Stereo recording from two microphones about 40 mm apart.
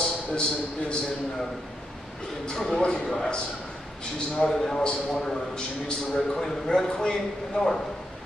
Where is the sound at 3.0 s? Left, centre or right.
Centre.